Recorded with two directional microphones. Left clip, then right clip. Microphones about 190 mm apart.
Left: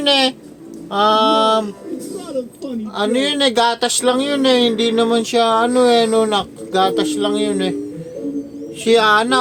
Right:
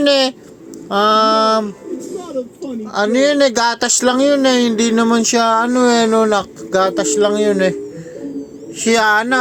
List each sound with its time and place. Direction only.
0.0 s speech: 35° right (ahead or behind)
2.8 s speech: 30° right (ahead or behind)
8.8 s speech: 25° right (ahead or behind)